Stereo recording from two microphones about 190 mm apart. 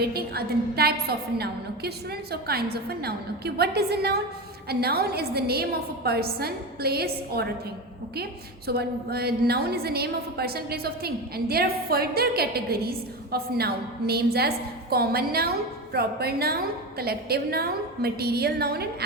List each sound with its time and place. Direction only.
0.0 s a woman's voice: 55° right (ahead or behind)